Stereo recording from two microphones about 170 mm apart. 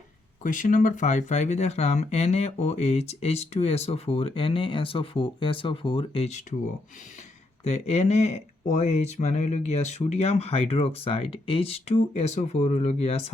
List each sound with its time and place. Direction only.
0.4 s speech: 50° left (ahead or behind)
7.6 s speech: 40° left (ahead or behind)